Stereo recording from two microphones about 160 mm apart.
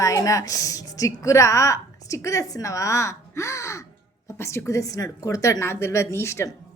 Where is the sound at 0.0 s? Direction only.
20° left (ahead or behind).